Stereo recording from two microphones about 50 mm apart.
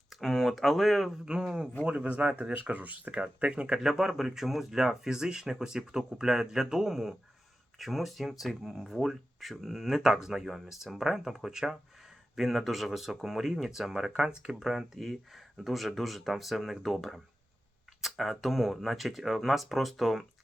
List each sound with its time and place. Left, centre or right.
0.1 s speech: centre
1.2 s speech: centre
1.9 s speech: right
3.8 s speech: centre
14.7 s speech: centre